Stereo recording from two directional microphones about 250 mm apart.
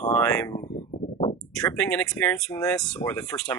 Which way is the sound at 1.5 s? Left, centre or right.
Centre.